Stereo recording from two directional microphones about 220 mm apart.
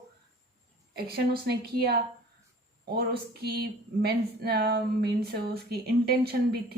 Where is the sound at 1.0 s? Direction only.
45° right (ahead or behind).